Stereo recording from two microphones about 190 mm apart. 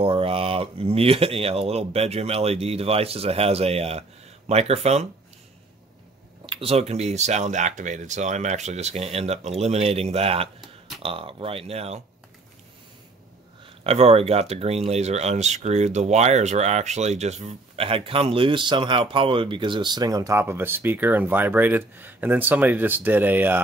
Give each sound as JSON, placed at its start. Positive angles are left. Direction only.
{"t": 0.0, "sound": "speech", "side_deg": -30}
{"t": 6.4, "sound": "speech", "side_deg": -30}
{"t": 13.8, "sound": "speech", "side_deg": -30}